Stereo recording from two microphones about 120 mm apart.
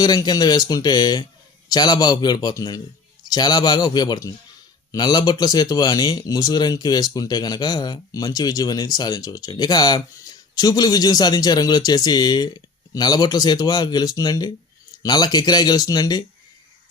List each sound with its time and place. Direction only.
0.0 s speech: 35° left (ahead or behind)